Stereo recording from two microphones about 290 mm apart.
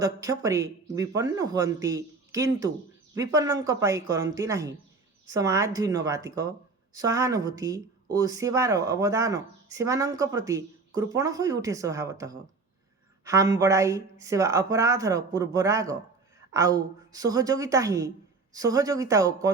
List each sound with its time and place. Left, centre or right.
0.0 s speech: centre